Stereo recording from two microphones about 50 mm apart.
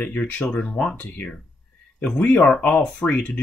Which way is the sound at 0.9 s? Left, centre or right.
Left.